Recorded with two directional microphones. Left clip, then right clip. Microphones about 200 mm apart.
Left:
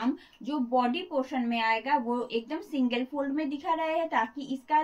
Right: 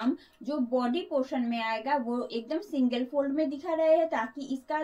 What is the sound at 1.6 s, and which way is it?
A woman's voice, 15° left (ahead or behind).